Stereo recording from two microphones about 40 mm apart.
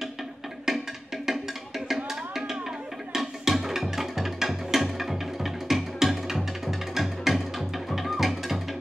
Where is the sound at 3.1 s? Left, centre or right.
Centre.